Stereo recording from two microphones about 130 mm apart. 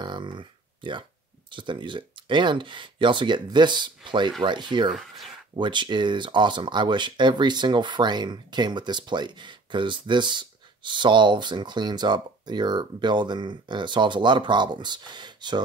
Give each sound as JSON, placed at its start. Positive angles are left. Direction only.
{"t": 0.0, "sound": "a sound", "side_deg": -35}
{"t": 1.5, "sound": "speech", "side_deg": -40}
{"t": 4.9, "sound": "speech", "side_deg": 0}
{"t": 5.6, "sound": "speech", "side_deg": -35}